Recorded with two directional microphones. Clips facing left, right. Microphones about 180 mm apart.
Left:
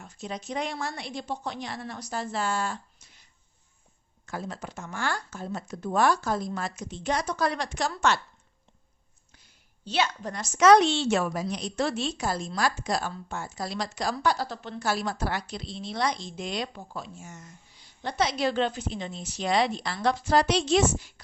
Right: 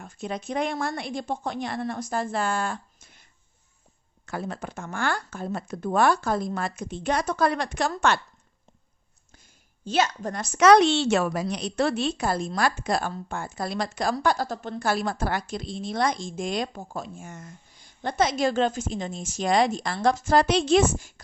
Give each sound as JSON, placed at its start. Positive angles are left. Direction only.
{"t": 0.0, "sound": "a woman's voice", "side_deg": -55}
{"t": 4.3, "sound": "speech", "side_deg": -60}
{"t": 9.3, "sound": "a woman's voice", "side_deg": -45}